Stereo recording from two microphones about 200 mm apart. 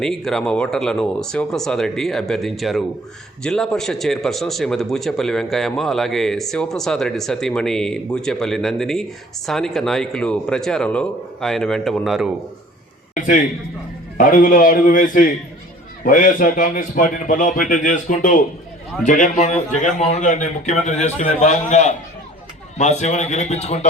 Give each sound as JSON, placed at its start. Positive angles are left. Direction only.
{"t": 0.0, "sound": "a man's voice", "side_deg": 0}
{"t": 13.1, "sound": "a man's voice", "side_deg": 40}